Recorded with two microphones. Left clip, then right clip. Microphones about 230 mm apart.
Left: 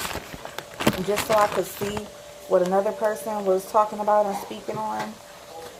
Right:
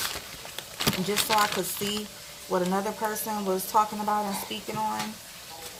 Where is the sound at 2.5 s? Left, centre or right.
Right.